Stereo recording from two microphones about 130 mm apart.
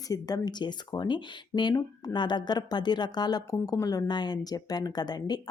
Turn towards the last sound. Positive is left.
turn(degrees=30)  # may be behind; listen again after turning